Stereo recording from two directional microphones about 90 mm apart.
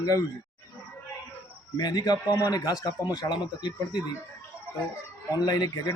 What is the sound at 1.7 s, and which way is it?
Speech, 45° left (ahead or behind).